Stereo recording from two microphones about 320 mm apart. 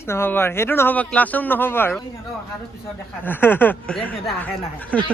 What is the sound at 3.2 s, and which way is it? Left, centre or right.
Speech, centre.